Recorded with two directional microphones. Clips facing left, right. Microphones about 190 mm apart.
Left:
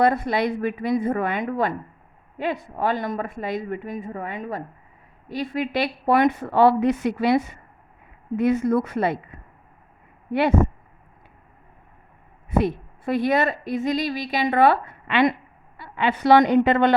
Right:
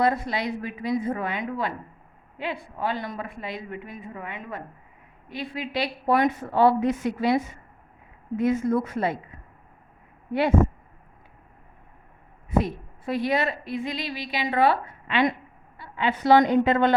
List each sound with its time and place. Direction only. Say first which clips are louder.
0.0 s a woman's voice: left 4 dB; 55° left (ahead or behind)
12.5 s a woman's voice: left 3 dB; 60° left (ahead or behind)